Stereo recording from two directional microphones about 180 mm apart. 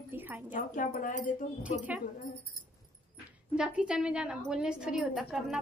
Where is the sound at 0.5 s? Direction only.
45° left (ahead or behind).